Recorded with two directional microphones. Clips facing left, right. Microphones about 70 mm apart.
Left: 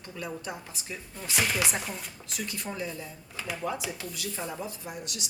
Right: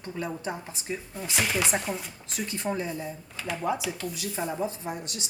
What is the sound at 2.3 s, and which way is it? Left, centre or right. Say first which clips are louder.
Speech: right 6 dB; right.